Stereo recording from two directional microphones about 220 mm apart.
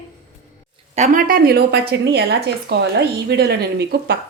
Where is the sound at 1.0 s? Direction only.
40° right (ahead or behind).